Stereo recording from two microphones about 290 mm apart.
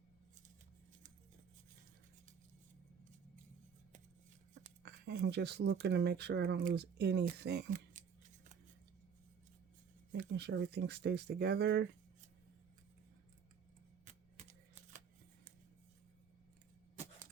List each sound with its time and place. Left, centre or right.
4.8 s speech: right
10.1 s speech: right